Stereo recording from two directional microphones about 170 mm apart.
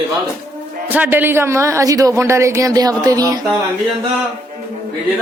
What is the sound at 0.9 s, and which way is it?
Speech, 10° right (ahead or behind).